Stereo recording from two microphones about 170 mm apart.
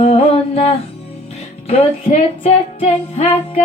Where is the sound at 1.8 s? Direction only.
40° left (ahead or behind).